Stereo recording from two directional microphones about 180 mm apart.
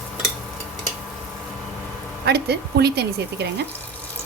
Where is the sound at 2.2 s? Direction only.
65° right (ahead or behind).